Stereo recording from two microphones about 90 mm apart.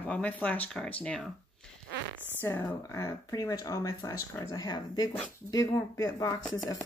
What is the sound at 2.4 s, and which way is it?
Speech, 30° left (ahead or behind).